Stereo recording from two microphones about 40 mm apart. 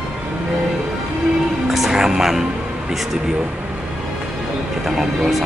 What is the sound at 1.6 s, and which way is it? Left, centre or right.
Music, centre.